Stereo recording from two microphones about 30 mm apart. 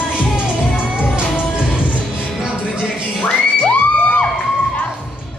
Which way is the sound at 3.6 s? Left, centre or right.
Left.